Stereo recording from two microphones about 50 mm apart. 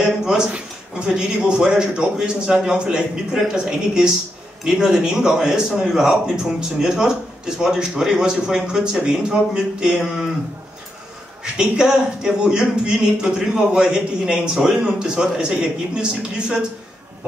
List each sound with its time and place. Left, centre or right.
0.0 s a man's voice: centre
11.5 s a man's voice: centre